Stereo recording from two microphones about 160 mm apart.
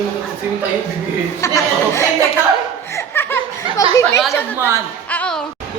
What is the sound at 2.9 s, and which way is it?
Laughter, 15° left (ahead or behind).